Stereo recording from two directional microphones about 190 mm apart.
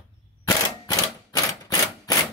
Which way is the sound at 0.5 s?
20° left (ahead or behind).